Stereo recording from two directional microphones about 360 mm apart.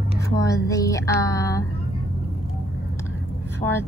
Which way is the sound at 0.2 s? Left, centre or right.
Centre.